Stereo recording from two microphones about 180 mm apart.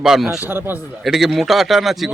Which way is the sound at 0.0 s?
Centre (ahead or behind).